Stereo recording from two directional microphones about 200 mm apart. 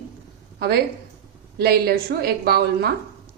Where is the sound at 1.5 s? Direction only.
50° right (ahead or behind).